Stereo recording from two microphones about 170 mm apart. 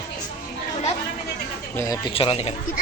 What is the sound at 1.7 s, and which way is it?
Speech, 20° left (ahead or behind).